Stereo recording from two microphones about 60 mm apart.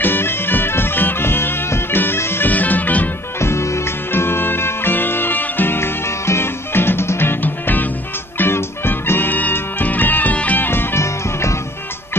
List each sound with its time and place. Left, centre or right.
0.0 s music: left
2.5 s music: left
3.3 s music: left